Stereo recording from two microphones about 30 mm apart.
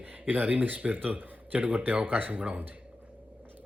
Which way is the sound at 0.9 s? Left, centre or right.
Right.